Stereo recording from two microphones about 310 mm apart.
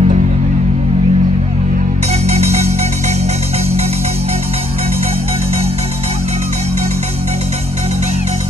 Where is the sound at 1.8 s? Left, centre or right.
Right.